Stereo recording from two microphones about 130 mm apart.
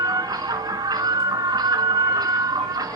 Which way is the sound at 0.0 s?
30° right (ahead or behind).